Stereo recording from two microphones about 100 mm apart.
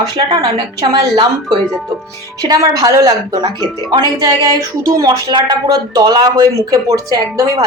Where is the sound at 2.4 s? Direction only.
40° right (ahead or behind).